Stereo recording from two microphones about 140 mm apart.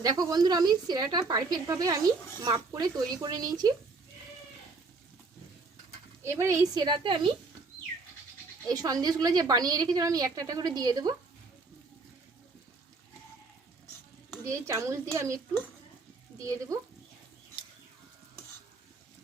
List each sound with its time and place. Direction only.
0.0 s a woman's voice: 25° right (ahead or behind)
6.2 s a woman's voice: 20° right (ahead or behind); by 7.3 s 35° right (ahead or behind)
8.6 s a woman's voice: 25° right (ahead or behind)
14.4 s a woman's voice: 20° right (ahead or behind)
16.4 s a woman's voice: 25° right (ahead or behind)